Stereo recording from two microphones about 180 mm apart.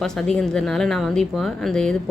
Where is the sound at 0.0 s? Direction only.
5° left (ahead or behind).